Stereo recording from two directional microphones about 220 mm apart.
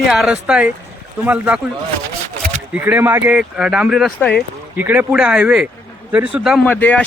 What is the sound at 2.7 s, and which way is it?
Speech, 10° right (ahead or behind).